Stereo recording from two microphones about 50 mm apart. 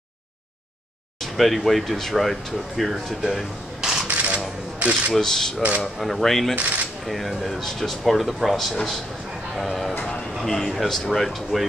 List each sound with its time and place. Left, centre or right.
1.2 s speech: centre
4.1 s a sound: right
4.7 s speech: right
5.1 s speech: centre
6.5 s speech: right
7.1 s speech: centre
10.4 s speech: centre